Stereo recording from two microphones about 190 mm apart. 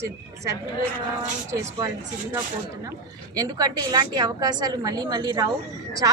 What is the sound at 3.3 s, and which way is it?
A woman's voice, 20° right (ahead or behind).